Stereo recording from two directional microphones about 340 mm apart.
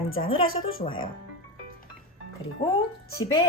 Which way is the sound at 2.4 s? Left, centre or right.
Centre.